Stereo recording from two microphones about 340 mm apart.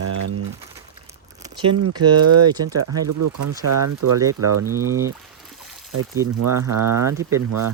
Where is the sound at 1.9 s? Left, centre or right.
Centre.